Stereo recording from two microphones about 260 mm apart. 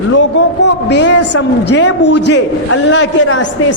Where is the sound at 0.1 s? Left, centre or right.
Left.